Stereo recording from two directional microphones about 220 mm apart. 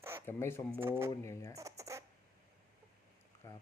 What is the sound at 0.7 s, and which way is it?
Speech, 10° right (ahead or behind).